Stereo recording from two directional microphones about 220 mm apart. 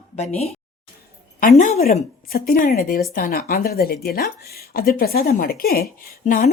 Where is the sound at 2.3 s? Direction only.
40° left (ahead or behind).